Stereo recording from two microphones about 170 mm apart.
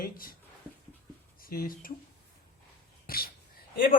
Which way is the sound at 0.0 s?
60° left (ahead or behind).